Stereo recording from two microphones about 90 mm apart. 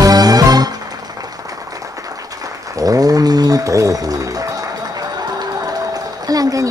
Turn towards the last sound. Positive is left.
turn(degrees=-40)  # may be behind; listen again after turning